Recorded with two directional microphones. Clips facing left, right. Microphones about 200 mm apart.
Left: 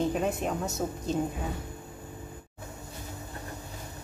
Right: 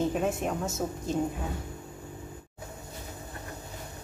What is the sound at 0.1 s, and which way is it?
A woman's voice, centre (ahead or behind).